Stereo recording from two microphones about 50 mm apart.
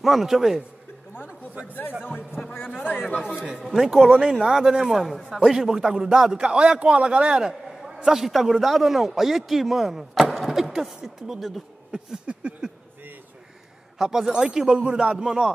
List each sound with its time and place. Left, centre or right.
0.0 s a man's voice: centre
2.0 s a man's voice: centre
2.5 s a man's voice: left
3.4 s a man's voice: centre
3.7 s a man's voice: centre
4.3 s a man's voice: centre
7.4 s a man's voice: centre
12.3 s a sound: right
13.9 s a man's voice: centre